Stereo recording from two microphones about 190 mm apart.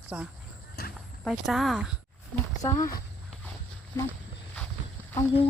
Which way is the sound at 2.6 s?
20° left (ahead or behind).